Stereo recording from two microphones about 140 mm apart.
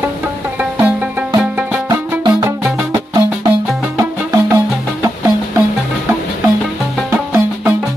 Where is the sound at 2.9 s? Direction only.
25° right (ahead or behind).